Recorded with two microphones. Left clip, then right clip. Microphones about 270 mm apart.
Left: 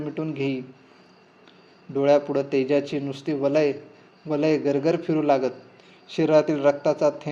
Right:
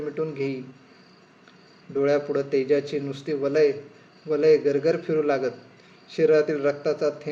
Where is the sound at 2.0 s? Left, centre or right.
Left.